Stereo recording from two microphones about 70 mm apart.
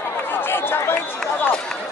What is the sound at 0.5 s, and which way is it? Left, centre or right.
Chatter, left.